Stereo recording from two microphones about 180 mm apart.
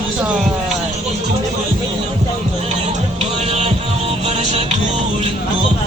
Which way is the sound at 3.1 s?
35° right (ahead or behind).